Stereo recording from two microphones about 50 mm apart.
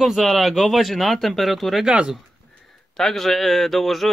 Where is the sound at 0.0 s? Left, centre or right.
Centre.